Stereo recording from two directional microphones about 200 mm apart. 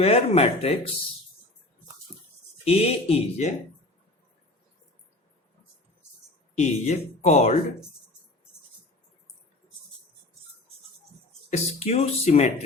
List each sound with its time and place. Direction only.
0.0 s speech: 30° left (ahead or behind)
2.6 s speech: 30° left (ahead or behind)
6.6 s speech: 35° left (ahead or behind)
11.5 s speech: 30° left (ahead or behind)